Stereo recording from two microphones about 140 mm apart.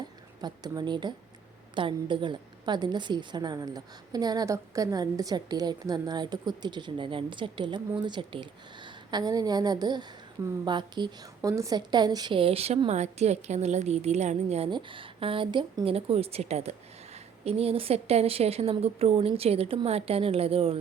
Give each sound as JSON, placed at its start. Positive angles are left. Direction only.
{"t": 0.4, "sound": "a woman's voice", "side_deg": -30}
{"t": 14.7, "sound": "a woman's voice", "side_deg": -35}